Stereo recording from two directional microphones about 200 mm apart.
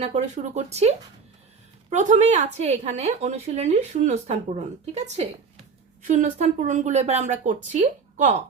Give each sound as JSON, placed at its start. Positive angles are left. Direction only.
{"t": 0.0, "sound": "a woman's voice", "side_deg": -35}